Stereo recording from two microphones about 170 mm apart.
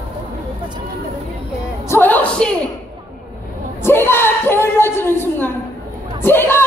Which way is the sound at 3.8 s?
15° left (ahead or behind).